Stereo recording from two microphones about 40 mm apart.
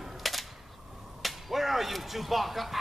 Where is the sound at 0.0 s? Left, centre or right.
Centre.